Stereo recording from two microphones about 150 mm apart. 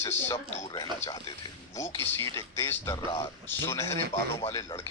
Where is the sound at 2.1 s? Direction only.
20° left (ahead or behind).